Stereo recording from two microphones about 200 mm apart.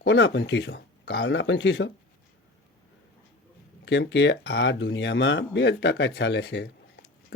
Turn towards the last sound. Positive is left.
turn(degrees=55)  # may be behind; listen again after turning